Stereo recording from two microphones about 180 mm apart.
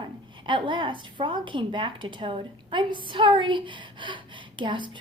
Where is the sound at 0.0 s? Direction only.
25° right (ahead or behind).